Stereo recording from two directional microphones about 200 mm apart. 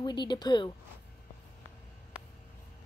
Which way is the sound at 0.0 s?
20° left (ahead or behind).